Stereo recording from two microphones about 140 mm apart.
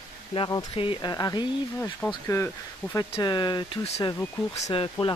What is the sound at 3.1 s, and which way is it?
Speech, 30° left (ahead or behind).